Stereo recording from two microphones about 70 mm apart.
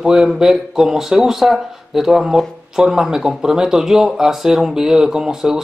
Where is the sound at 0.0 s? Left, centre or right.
Centre.